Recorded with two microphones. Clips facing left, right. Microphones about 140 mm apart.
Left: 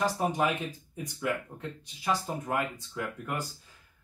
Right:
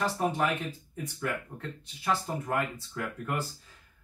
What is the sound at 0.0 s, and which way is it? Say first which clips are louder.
Speech: left 1 dB; 15° left (ahead or behind).